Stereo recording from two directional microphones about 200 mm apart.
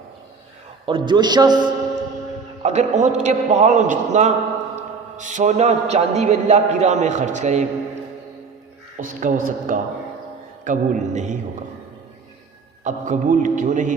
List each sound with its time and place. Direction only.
0.9 s a man's voice: 25° right (ahead or behind)
2.6 s a man's voice: 35° right (ahead or behind)
9.0 s a man's voice: 40° right (ahead or behind)
12.8 s a man's voice: 40° right (ahead or behind)